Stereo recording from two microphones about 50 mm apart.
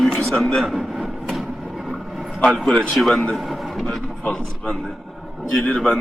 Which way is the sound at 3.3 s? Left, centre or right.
Centre.